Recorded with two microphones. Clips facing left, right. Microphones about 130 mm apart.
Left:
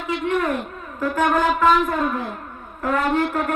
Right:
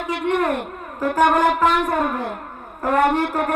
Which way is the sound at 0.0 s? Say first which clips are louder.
Right 1 dB; 60° right (ahead or behind).